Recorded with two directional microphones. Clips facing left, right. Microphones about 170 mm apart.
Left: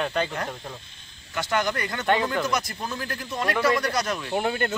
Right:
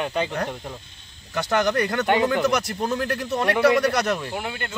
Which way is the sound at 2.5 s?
70° right (ahead or behind).